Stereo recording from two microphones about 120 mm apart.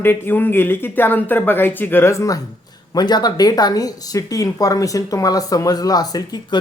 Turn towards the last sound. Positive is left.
turn(degrees=35)  # may be behind; listen again after turning